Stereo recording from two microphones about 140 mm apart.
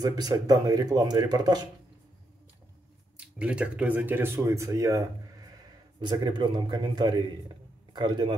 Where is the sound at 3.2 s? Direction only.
10° right (ahead or behind).